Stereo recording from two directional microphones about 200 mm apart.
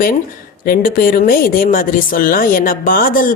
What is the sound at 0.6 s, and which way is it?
Speech, 45° left (ahead or behind).